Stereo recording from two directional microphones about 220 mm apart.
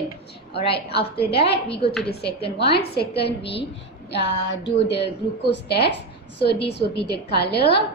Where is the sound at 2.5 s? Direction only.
50° left (ahead or behind).